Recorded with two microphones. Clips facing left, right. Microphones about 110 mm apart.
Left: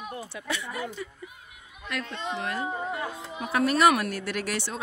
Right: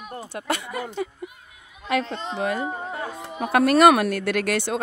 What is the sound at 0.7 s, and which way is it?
Speech, 75° right (ahead or behind).